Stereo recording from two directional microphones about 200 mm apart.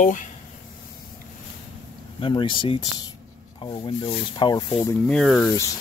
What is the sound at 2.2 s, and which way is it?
Speech, 25° left (ahead or behind).